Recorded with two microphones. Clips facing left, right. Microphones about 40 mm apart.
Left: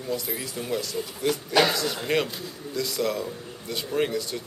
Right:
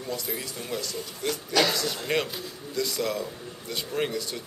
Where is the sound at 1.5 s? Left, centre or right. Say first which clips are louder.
Left 2 dB; centre.